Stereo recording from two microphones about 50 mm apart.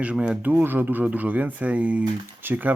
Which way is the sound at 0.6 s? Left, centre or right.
Right.